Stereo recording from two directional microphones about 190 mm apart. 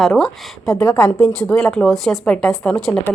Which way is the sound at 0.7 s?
15° left (ahead or behind).